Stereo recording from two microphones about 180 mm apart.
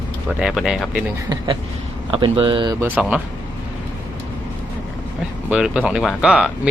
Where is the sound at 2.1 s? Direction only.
30° right (ahead or behind).